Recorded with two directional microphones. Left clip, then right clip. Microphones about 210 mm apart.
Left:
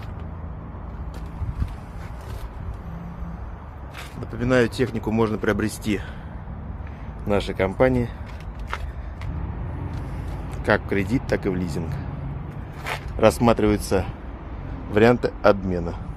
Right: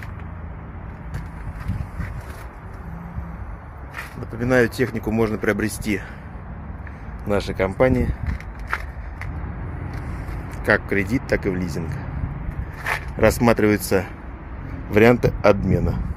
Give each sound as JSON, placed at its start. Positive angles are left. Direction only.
{"t": 4.2, "sound": "speech", "side_deg": -20}
{"t": 7.2, "sound": "speech", "side_deg": -5}
{"t": 10.6, "sound": "speech", "side_deg": -10}
{"t": 12.9, "sound": "speech", "side_deg": -10}